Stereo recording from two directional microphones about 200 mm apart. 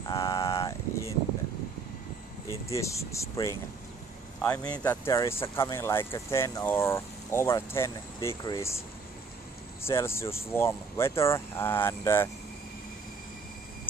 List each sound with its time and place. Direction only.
0.0 s a sound: 20° left (ahead or behind)
2.7 s speech: 15° left (ahead or behind)
9.8 s speech: 15° left (ahead or behind)